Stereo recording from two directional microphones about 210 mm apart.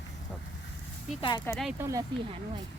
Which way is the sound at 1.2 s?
20° left (ahead or behind).